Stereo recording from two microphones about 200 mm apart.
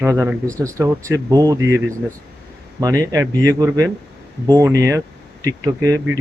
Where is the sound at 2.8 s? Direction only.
15° right (ahead or behind).